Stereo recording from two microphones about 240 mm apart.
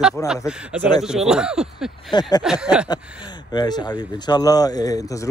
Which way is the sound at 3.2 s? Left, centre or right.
Centre.